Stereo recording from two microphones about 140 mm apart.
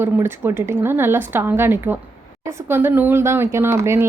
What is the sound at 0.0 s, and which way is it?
A woman's voice, 15° right (ahead or behind).